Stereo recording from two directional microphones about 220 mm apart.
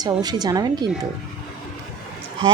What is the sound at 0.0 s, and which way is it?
Speech, 15° right (ahead or behind).